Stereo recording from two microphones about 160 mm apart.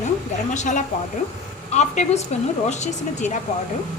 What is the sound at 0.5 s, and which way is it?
Speech, 50° left (ahead or behind).